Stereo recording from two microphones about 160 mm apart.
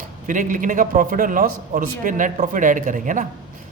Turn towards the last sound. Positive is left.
turn(degrees=-55)  # may be behind; listen again after turning